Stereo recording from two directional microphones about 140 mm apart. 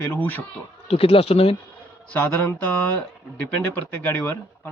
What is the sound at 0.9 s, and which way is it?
Speech, 45° left (ahead or behind).